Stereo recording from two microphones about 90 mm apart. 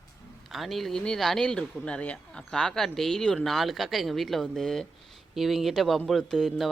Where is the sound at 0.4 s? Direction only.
Centre (ahead or behind).